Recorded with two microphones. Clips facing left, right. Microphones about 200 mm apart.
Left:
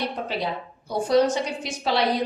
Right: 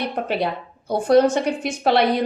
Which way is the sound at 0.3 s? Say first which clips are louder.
Right 5 dB; 60° right (ahead or behind).